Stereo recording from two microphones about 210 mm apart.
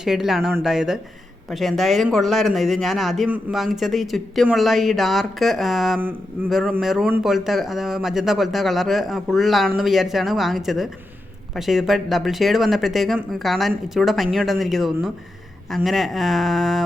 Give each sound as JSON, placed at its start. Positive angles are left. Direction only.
{"t": 0.0, "sound": "a man's voice", "side_deg": 0}